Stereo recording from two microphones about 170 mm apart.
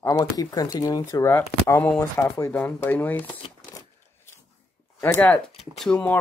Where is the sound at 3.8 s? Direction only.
15° left (ahead or behind).